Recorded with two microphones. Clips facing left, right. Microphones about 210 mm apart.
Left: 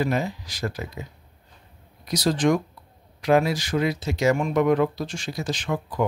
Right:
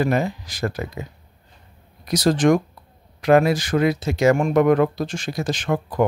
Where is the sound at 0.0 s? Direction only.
55° right (ahead or behind).